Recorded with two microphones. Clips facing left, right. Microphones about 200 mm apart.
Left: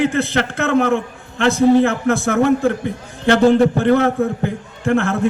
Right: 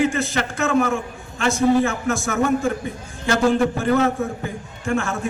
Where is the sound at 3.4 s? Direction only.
35° left (ahead or behind).